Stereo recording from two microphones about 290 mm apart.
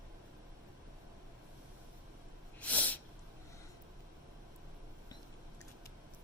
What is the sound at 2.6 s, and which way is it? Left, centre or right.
Sneeze, centre.